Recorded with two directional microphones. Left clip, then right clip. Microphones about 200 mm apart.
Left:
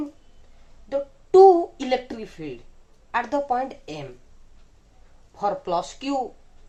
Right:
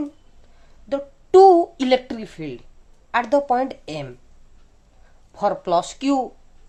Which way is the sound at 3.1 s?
55° right (ahead or behind).